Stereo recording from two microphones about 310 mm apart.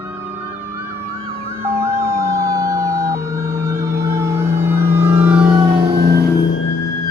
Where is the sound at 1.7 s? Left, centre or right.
Centre.